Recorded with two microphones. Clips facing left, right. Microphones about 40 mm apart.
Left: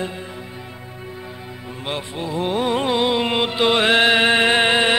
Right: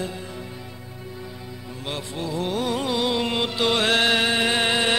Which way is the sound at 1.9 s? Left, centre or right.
Left.